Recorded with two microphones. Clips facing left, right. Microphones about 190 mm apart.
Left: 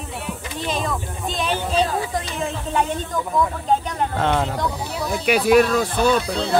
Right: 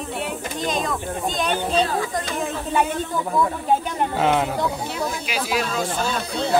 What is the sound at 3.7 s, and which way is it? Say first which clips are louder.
Speech: even; 5° right (ahead or behind).